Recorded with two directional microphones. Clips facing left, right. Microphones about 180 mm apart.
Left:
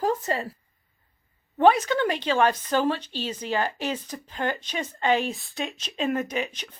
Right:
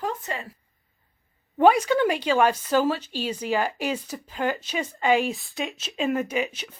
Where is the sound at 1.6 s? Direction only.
10° right (ahead or behind).